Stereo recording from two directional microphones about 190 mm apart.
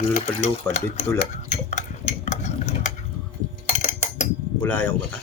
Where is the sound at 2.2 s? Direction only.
35° left (ahead or behind).